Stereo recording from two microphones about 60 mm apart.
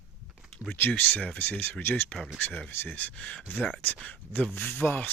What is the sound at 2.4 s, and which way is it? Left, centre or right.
Speech, left.